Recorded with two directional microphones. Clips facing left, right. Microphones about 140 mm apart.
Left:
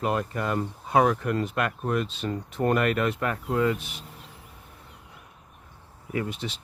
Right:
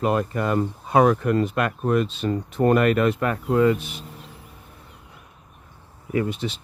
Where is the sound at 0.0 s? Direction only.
55° right (ahead or behind).